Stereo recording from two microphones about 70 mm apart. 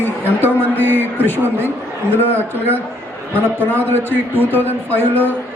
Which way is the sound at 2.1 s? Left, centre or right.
Left.